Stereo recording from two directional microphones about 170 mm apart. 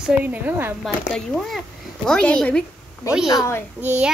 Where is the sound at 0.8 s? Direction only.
Centre (ahead or behind).